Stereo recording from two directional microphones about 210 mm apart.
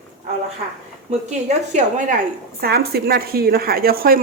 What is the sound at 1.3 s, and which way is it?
Speech, 35° right (ahead or behind).